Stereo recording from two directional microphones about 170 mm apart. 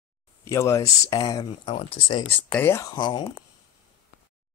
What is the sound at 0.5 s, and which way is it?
Speech, 15° left (ahead or behind).